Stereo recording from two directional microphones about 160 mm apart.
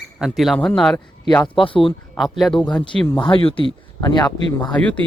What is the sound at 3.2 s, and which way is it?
Speech, 35° left (ahead or behind).